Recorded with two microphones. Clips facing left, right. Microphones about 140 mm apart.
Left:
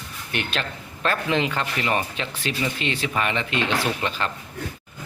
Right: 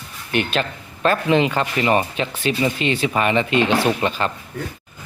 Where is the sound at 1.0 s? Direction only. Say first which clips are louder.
Right 6 dB; 5° right (ahead or behind).